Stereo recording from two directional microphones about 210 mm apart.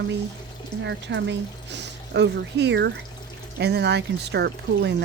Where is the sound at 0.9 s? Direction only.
55° right (ahead or behind).